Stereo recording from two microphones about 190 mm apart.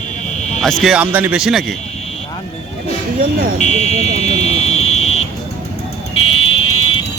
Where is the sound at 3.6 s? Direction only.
35° left (ahead or behind).